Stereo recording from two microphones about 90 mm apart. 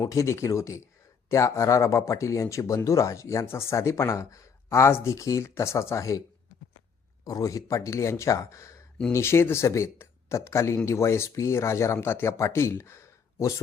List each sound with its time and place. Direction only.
0.1 s speech: 35° left (ahead or behind)
7.3 s speech: 40° left (ahead or behind)